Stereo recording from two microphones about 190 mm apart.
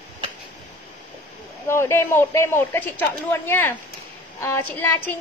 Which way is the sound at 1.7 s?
15° left (ahead or behind).